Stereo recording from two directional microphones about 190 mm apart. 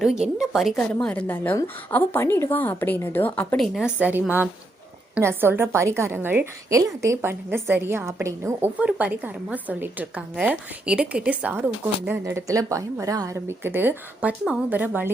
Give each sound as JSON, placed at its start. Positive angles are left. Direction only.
{"t": 0.0, "sound": "a woman's voice", "side_deg": -5}
{"t": 3.8, "sound": "a woman's voice", "side_deg": -5}